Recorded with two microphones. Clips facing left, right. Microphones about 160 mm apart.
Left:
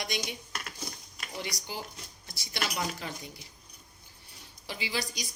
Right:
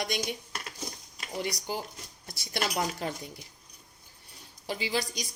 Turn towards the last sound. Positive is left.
turn(degrees=-45)  # may be behind; listen again after turning